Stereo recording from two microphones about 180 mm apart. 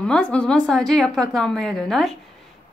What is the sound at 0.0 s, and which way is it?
Speech, 5° left (ahead or behind).